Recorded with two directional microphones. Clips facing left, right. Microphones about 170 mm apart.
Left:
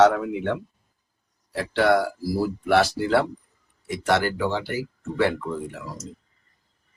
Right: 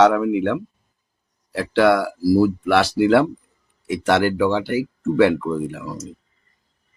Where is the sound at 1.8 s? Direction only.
80° right.